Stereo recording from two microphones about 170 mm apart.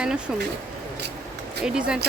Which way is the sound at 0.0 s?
5° right (ahead or behind).